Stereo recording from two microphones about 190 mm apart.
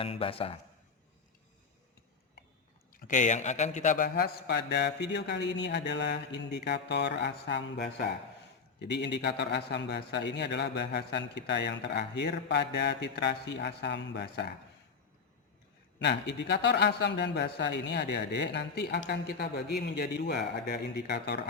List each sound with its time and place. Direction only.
0.0 s a man's voice: 30° left (ahead or behind)
2.9 s a man's voice: 40° left (ahead or behind); by 14.5 s 60° left (ahead or behind)
16.0 s a man's voice: 65° left (ahead or behind)